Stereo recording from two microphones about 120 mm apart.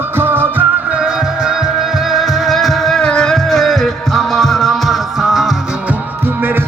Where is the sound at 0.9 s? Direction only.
5° right (ahead or behind).